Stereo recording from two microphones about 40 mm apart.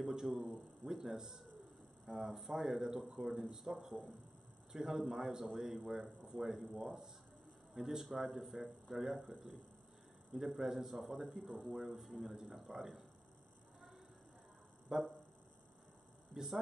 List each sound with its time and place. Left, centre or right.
0.1 s a man's voice: centre
10.3 s a man's voice: centre
14.9 s a man's voice: centre
16.3 s speech: centre